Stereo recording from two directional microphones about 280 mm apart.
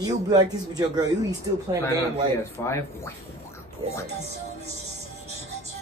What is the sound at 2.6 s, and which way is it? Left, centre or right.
Speech, centre.